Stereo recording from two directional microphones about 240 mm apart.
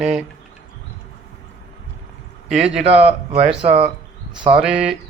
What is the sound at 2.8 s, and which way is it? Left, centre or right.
Speech, right.